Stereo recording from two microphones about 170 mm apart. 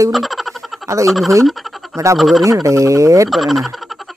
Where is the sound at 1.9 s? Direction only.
20° right (ahead or behind).